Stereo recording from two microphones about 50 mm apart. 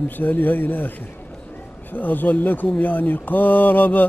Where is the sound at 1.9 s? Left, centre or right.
Left.